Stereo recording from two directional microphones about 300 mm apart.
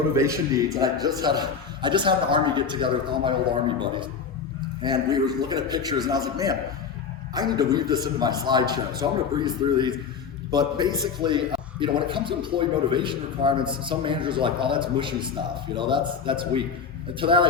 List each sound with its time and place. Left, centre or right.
0.1 s a man's voice: centre
4.8 s a man's voice: centre